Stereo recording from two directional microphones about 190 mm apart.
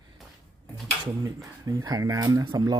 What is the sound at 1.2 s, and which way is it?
Speech, 15° right (ahead or behind).